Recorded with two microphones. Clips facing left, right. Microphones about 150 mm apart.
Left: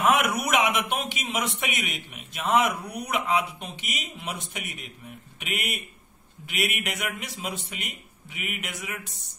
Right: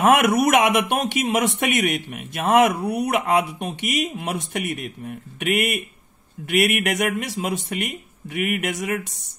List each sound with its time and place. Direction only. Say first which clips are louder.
0.3 s speech: right 8 dB; 70° right (ahead or behind)